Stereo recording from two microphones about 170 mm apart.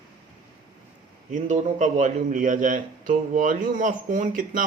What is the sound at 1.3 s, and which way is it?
A man's voice, 45° right (ahead or behind).